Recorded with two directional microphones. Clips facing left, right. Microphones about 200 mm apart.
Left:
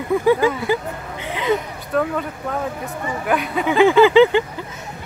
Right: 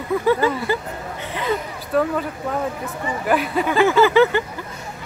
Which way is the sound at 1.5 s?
Centre (ahead or behind).